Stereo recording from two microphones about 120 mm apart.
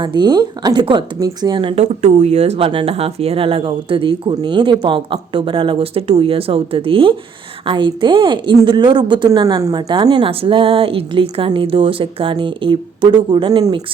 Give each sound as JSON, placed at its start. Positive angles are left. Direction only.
{"t": 0.0, "sound": "speech", "side_deg": -40}
{"t": 1.7, "sound": "a woman's voice", "side_deg": -70}